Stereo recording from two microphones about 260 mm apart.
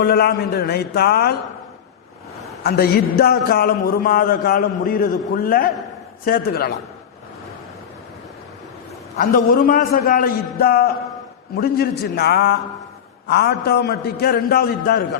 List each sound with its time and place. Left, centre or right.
0.0 s a man's voice: left
2.6 s a man's voice: left
9.1 s a man's voice: left